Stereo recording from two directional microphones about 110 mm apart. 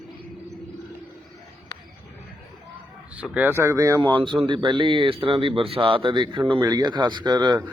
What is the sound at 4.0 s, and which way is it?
Speech, 45° right (ahead or behind).